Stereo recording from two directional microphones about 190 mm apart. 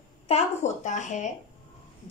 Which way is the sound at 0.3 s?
30° left (ahead or behind).